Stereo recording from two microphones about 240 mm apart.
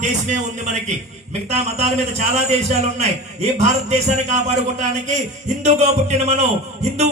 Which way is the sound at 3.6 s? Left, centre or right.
Right.